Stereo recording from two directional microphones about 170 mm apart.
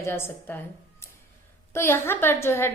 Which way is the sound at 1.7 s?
15° left (ahead or behind).